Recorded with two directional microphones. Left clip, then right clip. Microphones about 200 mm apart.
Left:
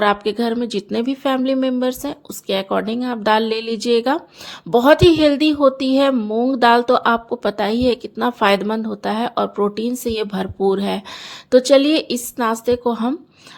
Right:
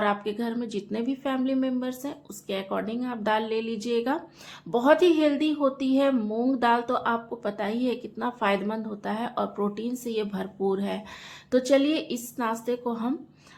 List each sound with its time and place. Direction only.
0.0 s a woman's voice: 45° left (ahead or behind)